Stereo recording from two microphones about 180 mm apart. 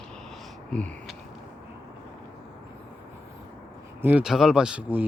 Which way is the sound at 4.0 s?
10° right (ahead or behind).